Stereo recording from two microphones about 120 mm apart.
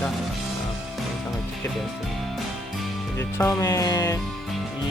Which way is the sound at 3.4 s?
25° left (ahead or behind).